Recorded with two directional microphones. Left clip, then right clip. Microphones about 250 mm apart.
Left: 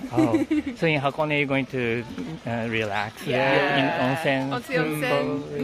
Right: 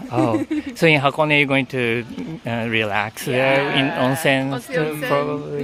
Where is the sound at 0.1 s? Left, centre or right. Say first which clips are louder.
Right 2 dB; right.